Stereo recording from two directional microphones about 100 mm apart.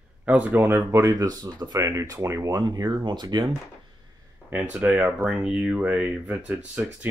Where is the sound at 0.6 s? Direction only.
20° right (ahead or behind); by 3.4 s 45° right (ahead or behind).